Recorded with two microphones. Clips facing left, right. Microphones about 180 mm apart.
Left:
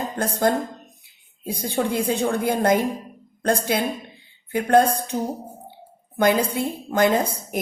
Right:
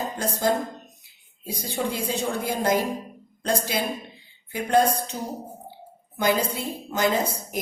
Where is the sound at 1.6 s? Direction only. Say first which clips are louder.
Left 5 dB; 55° left (ahead or behind).